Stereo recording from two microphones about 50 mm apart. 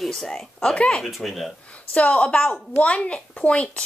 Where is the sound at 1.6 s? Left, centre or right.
Left.